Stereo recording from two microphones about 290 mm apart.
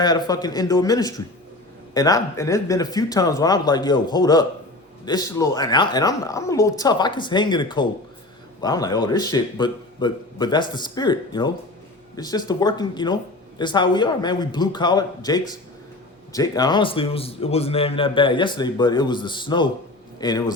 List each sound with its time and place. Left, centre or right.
0.0 s a man's voice: centre